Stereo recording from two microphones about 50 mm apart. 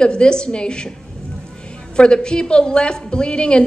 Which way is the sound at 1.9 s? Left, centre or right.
Centre.